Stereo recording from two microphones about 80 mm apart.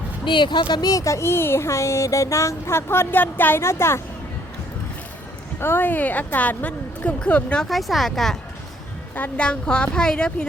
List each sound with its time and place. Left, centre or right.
0.3 s speech: left
5.5 s a woman's voice: left
7.7 s speech: centre
9.4 s a woman's voice: centre